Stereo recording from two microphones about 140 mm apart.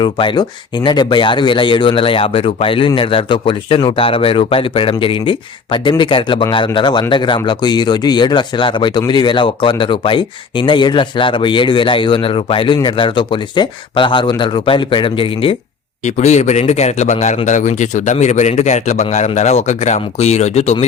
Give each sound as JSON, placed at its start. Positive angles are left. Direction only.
{"t": 0.0, "sound": "speech", "side_deg": 35}
{"t": 16.0, "sound": "speech", "side_deg": 55}